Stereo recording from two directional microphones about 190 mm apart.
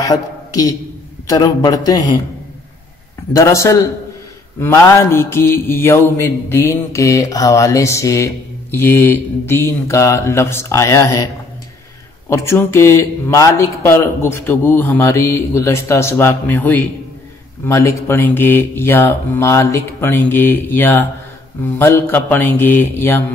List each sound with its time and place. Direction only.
0.0 s a man's voice: 20° left (ahead or behind)
3.3 s a man's voice: 15° left (ahead or behind)
12.3 s a man's voice: 15° left (ahead or behind)